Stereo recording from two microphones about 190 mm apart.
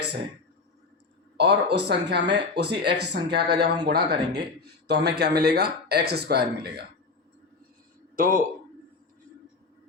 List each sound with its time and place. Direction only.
1.4 s speech: 60° right (ahead or behind)
8.1 s speech: 45° right (ahead or behind)